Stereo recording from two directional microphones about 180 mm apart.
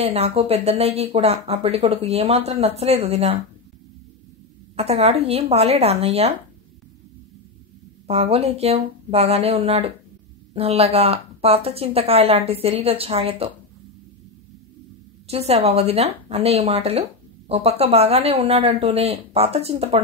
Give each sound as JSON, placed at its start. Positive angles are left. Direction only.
{"t": 0.0, "sound": "a woman's voice", "side_deg": -35}
{"t": 4.7, "sound": "a woman's voice", "side_deg": -35}
{"t": 8.1, "sound": "a woman's voice", "side_deg": -35}
{"t": 15.2, "sound": "a woman's voice", "side_deg": -35}